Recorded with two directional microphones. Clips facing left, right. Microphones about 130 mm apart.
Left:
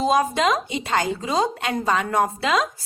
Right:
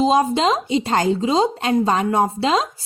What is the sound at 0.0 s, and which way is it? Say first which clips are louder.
A woman's voice: right 3 dB; 25° right (ahead or behind).